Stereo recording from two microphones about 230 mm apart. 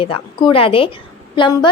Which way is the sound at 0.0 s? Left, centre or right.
Left.